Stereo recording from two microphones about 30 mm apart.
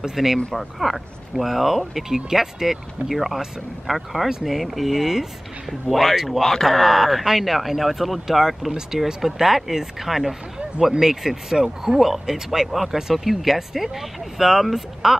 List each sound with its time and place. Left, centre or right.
0.0 s speech: centre
0.6 s speech: centre